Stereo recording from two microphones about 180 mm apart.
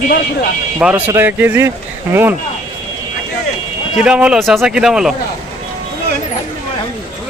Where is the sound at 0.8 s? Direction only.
5° right (ahead or behind).